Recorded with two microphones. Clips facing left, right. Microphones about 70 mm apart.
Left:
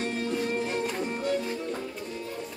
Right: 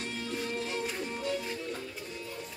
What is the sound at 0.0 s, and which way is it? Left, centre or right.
Music, left.